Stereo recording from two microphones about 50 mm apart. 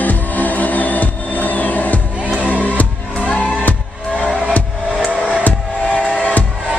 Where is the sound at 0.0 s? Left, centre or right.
Left; by 4.3 s centre.